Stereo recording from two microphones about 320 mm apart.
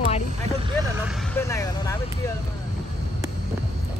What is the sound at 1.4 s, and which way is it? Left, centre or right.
Speech, centre.